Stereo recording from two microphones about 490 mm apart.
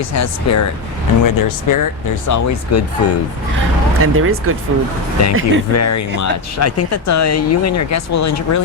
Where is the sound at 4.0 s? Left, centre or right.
Right.